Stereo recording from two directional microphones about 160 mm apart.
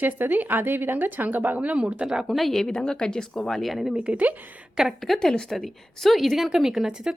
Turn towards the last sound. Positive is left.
turn(degrees=-5)  # may be behind; listen again after turning